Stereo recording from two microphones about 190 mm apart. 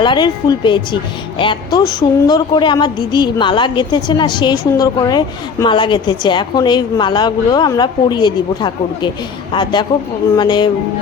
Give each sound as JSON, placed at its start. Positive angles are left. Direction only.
{"t": 0.0, "sound": "a woman's voice", "side_deg": 25}